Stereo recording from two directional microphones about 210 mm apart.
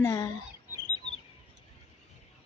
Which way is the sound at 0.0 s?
15° left (ahead or behind).